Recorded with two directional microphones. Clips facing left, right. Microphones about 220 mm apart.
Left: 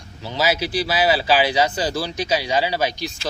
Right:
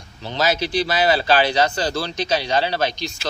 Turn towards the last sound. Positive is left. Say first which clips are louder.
# even
turn(degrees=10)  # may be behind; listen again after turning